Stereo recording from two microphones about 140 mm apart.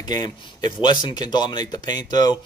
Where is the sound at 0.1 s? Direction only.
30° left (ahead or behind).